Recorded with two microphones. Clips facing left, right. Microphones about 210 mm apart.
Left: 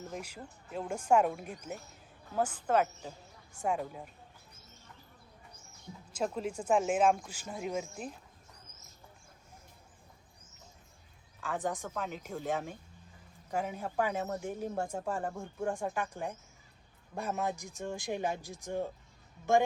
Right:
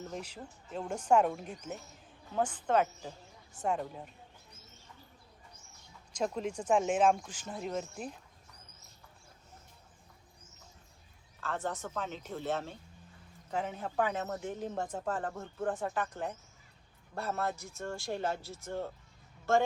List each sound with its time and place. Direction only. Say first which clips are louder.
0.1 s speech: even; 5° left (ahead or behind)
6.1 s speech: even; 5° left (ahead or behind)
11.4 s speech: left 1 dB; 15° left (ahead or behind)